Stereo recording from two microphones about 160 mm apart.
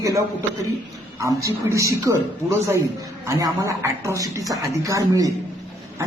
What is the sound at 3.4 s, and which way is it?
A man's voice, 15° right (ahead or behind).